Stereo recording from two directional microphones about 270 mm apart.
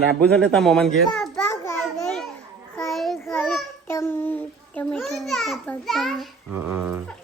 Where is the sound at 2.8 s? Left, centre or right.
Centre.